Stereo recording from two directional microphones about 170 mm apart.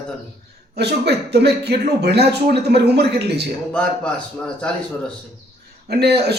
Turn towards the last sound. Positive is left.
turn(degrees=-75)  # may be behind; listen again after turning